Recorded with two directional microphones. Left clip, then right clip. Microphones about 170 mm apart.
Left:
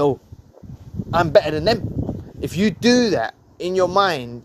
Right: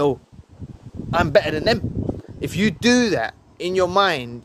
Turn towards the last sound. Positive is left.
turn(degrees=-5)  # may be behind; listen again after turning